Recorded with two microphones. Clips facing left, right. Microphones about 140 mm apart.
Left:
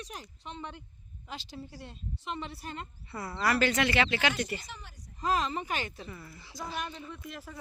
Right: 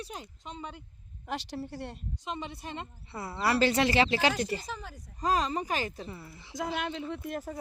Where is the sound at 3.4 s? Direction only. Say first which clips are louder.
Right 2 dB; 30° right (ahead or behind).